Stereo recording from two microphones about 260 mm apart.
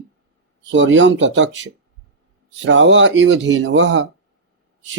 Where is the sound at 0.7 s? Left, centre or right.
Right.